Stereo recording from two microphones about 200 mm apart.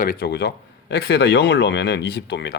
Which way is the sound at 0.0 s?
50° left (ahead or behind).